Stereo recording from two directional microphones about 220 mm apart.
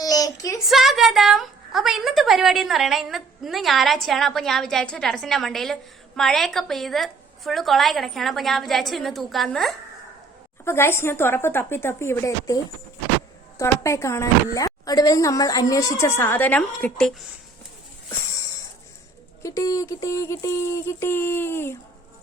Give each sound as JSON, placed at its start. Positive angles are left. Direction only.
{"t": 0.0, "sound": "a sound", "side_deg": 15}
{"t": 0.7, "sound": "a woman's voice", "side_deg": 0}
{"t": 13.6, "sound": "speech", "side_deg": 15}
{"t": 19.4, "sound": "speech", "side_deg": 15}